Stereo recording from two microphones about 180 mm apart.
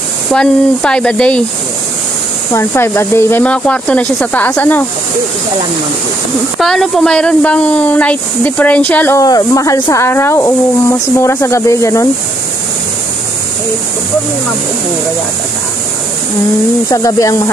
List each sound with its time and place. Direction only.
0.3 s speech: 5° left (ahead or behind)
2.5 s a woman's voice: 15° left (ahead or behind)
6.6 s a woman's voice: centre (ahead or behind)
16.9 s a woman's voice: 20° left (ahead or behind)